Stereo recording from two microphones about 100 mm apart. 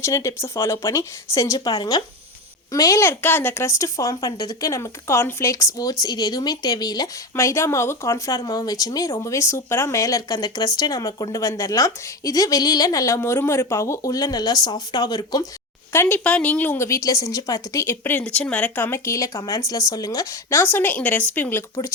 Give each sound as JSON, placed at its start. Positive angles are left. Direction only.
{"t": 0.0, "sound": "speech", "side_deg": 30}
{"t": 2.7, "sound": "a woman's voice", "side_deg": 30}
{"t": 7.3, "sound": "a woman's voice", "side_deg": 30}
{"t": 15.9, "sound": "speech", "side_deg": 20}
{"t": 16.7, "sound": "speech", "side_deg": 30}
{"t": 18.9, "sound": "a woman's voice", "side_deg": 25}
{"t": 20.6, "sound": "speech", "side_deg": 20}